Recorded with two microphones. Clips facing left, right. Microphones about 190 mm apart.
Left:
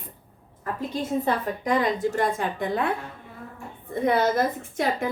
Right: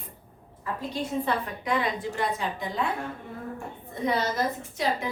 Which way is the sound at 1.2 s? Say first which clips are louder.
Left 3 dB; 45° left (ahead or behind).